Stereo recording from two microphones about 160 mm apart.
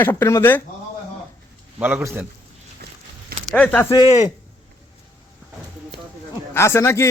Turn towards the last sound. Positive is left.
turn(degrees=15)  # may be behind; listen again after turning